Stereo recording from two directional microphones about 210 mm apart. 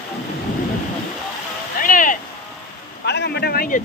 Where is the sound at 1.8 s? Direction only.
40° left (ahead or behind).